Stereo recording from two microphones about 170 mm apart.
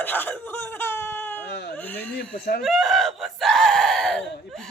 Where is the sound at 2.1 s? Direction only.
60° left (ahead or behind).